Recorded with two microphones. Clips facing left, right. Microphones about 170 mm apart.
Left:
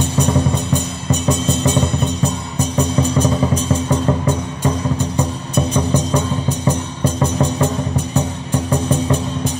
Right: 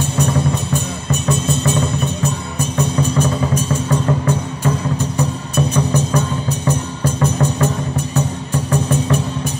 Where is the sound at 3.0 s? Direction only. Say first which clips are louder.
Left 2 dB; 20° left (ahead or behind).